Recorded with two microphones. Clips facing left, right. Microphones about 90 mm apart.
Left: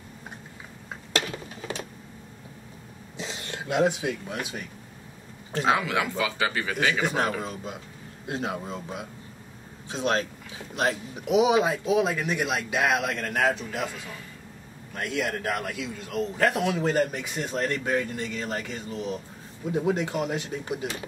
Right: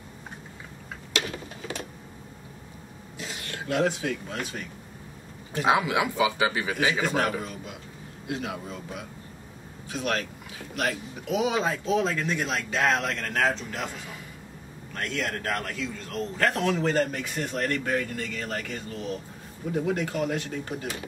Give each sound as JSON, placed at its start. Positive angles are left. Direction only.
{"t": 3.2, "sound": "speech", "side_deg": 25}
{"t": 5.7, "sound": "speech", "side_deg": -15}
{"t": 7.0, "sound": "a man's voice", "side_deg": 20}
{"t": 8.3, "sound": "a man's voice", "side_deg": 30}
{"t": 15.0, "sound": "a man's voice", "side_deg": 10}